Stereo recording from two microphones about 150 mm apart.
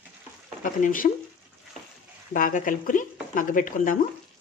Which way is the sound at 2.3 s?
60° left (ahead or behind).